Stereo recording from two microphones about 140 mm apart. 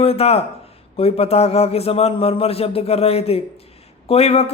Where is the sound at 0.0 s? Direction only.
45° left (ahead or behind).